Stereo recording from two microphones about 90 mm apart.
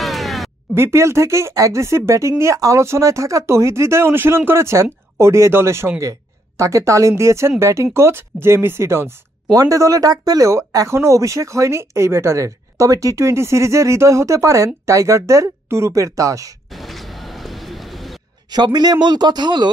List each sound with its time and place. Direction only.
0.0 s a sound: centre (ahead or behind)
0.7 s speech: 30° right (ahead or behind)
16.7 s bird: centre (ahead or behind)
18.5 s speech: 50° right (ahead or behind)